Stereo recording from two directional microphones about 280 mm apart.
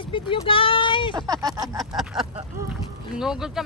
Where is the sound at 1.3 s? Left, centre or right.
Centre.